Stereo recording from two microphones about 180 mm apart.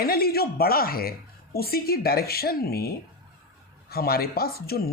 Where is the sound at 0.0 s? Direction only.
55° left (ahead or behind).